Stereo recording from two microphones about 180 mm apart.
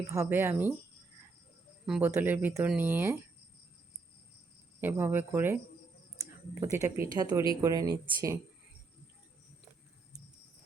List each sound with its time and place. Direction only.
0.1 s speech: 15° right (ahead or behind)
1.9 s speech: 10° right (ahead or behind)
4.8 s speech: 10° right (ahead or behind)